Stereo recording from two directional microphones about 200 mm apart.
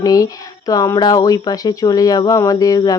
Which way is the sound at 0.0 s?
20° left (ahead or behind).